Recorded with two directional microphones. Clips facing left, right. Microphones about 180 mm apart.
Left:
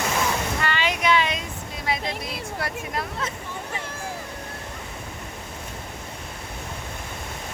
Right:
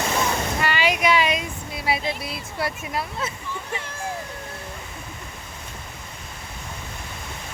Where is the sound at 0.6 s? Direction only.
10° right (ahead or behind).